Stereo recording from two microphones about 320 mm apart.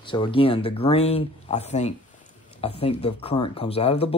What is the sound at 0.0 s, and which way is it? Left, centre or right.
Speech, centre.